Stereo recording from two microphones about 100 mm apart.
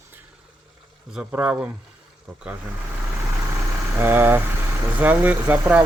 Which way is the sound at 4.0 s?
20° right (ahead or behind).